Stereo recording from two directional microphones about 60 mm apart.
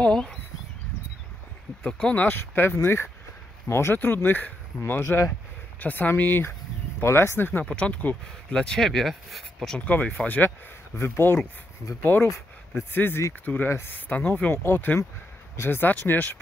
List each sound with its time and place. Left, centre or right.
0.0 s a sound: centre
1.9 s speech: centre
2.1 s speech: left
4.0 s speech: left
7.6 s speech: centre
8.5 s speech: centre
9.8 s speech: left
11.0 s speech: left
13.9 s speech: left
14.5 s speech: left